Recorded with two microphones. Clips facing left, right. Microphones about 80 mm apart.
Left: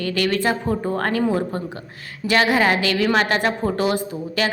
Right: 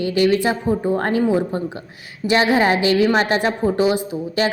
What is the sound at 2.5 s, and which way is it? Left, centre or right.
A woman's voice, right.